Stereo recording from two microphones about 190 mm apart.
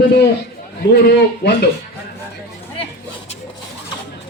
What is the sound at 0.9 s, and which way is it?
Music, 60° left (ahead or behind).